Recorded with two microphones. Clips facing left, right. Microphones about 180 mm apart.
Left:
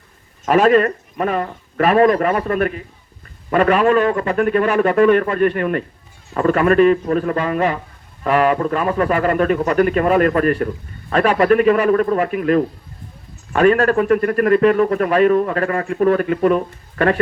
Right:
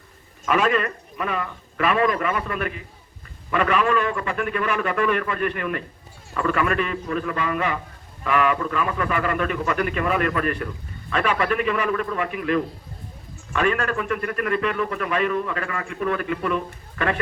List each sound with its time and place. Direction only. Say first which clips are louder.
0.4 s a man's voice: left 8 dB; 40° left (ahead or behind)